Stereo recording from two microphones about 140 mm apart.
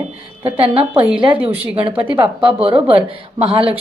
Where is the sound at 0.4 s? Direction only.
40° right (ahead or behind).